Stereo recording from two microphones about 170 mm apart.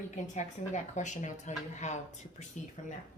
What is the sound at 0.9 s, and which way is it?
Speech, 45° left (ahead or behind).